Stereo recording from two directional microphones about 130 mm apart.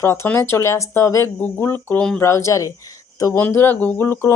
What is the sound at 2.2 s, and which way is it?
Speech, 20° left (ahead or behind).